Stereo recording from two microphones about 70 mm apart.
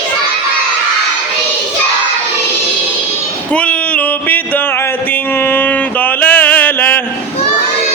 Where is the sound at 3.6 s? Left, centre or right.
Centre.